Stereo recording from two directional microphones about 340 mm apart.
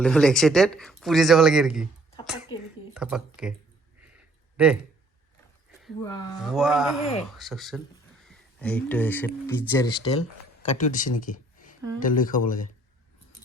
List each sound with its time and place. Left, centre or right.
0.0 s speech: centre
2.9 s speech: centre
4.5 s speech: centre
6.0 s speech: centre
6.4 s speech: centre
10.8 s speech: left